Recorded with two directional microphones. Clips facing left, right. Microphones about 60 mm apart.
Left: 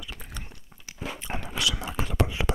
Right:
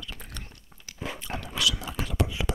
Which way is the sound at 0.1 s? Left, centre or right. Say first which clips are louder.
Left 1 dB; centre.